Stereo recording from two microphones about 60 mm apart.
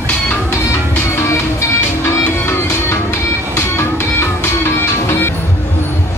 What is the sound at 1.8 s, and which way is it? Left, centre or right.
Music, left.